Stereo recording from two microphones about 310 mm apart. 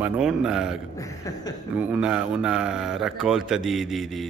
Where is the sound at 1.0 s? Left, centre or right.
Centre.